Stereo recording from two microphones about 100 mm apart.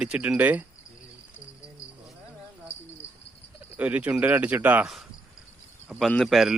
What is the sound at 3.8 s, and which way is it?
Cricket, 15° right (ahead or behind).